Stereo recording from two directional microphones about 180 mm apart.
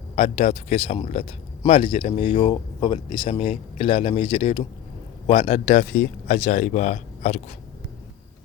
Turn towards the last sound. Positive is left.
turn(degrees=40)  # may be behind; listen again after turning